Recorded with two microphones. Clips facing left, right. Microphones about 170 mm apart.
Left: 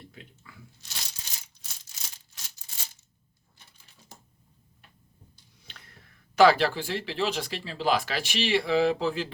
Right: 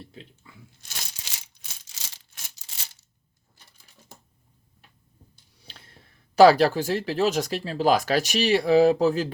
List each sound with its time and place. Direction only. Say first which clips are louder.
0.0 s crunch: right 4 dB; 30° right (ahead or behind)
1.3 s coin: right 2 dB; 90° right
2.3 s a sound: right 2 dB; 75° right (ahead or behind)
5.6 s speech: right 2 dB; 30° right (ahead or behind)